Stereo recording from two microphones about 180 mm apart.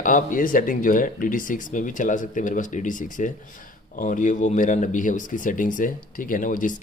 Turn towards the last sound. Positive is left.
turn(degrees=45)  # may be behind; listen again after turning